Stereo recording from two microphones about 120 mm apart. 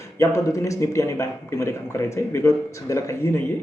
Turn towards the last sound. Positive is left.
turn(degrees=25)  # may be behind; listen again after turning